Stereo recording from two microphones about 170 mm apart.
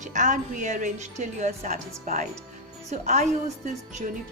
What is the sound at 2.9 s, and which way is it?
Speech, 40° right (ahead or behind).